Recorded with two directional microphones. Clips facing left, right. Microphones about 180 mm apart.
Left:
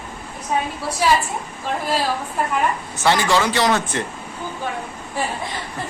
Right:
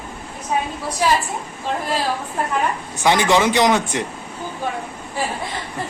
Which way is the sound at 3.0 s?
15° right (ahead or behind).